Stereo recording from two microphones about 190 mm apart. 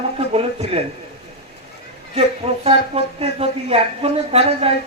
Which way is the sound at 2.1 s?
30° right (ahead or behind).